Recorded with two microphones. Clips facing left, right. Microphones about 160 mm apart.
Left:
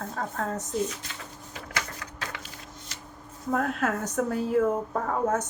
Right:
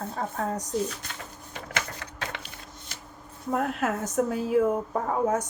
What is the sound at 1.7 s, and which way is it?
Typewriter, 25° right (ahead or behind).